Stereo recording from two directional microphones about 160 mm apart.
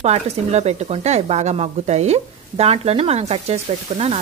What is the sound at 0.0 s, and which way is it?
Speech, 40° right (ahead or behind).